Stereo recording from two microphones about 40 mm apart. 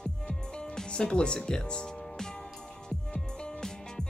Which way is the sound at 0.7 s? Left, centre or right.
Left.